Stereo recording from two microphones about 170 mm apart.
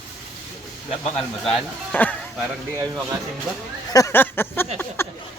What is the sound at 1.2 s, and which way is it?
Speech, 5° left (ahead or behind).